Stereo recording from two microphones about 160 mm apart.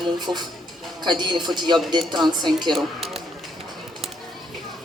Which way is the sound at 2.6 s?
Centre (ahead or behind).